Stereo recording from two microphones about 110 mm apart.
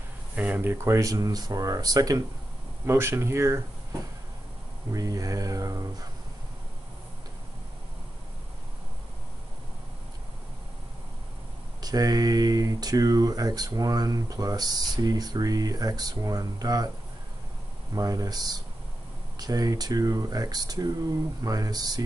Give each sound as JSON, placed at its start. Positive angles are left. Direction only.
{"t": 0.4, "sound": "speech", "side_deg": -15}
{"t": 4.9, "sound": "speech", "side_deg": -30}
{"t": 11.8, "sound": "speech", "side_deg": -35}
{"t": 17.9, "sound": "speech", "side_deg": -35}